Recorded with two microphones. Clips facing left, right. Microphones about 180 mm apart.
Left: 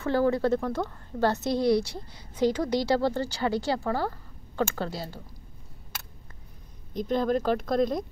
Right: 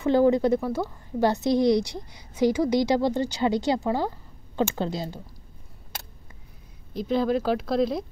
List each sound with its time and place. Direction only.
0.0 s a woman's voice: 20° right (ahead or behind)
6.9 s speech: 5° right (ahead or behind)